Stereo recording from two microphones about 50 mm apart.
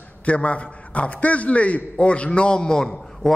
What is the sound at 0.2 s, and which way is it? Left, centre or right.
A man's voice, left.